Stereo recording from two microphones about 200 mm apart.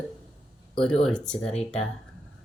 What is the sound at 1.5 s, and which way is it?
Speech, 35° left (ahead or behind).